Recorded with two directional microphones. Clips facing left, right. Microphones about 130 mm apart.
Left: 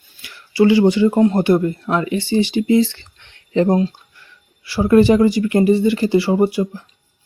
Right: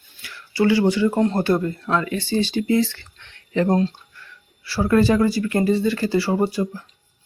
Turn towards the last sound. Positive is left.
turn(degrees=15)  # may be behind; listen again after turning